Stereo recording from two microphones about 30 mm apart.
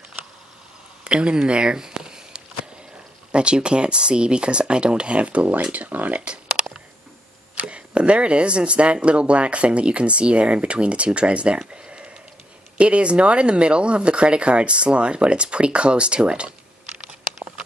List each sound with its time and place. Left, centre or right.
1.0 s speech: right
1.8 s a sound: right
3.3 s speech: right
5.5 s speech: right
5.9 s speech: right
7.6 s speech: right